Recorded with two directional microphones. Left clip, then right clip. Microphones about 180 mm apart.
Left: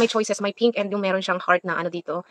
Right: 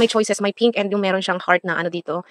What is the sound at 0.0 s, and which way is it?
Speech, 40° right (ahead or behind).